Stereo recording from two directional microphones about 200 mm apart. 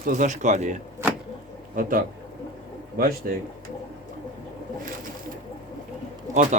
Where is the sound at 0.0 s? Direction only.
40° right (ahead or behind).